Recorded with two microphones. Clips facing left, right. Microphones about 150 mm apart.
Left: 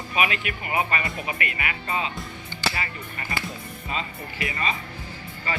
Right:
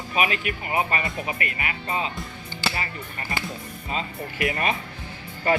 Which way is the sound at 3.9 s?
50° right (ahead or behind).